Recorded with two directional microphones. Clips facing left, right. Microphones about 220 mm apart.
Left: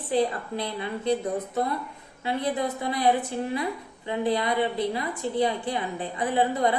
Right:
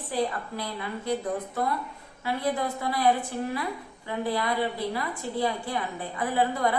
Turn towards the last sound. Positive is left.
turn(degrees=20)  # may be behind; listen again after turning